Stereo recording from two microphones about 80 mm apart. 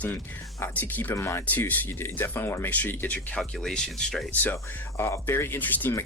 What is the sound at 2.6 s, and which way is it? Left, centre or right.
Speech, left.